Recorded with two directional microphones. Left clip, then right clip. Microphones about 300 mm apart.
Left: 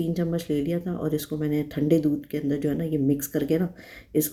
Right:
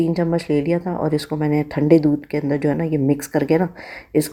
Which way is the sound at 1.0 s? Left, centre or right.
Centre.